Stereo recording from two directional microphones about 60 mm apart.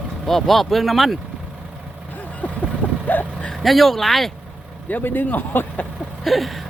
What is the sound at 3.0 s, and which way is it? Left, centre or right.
Vehicle, left.